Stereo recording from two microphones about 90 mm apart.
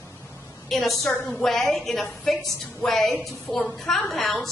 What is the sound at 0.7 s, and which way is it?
A woman's voice, centre (ahead or behind).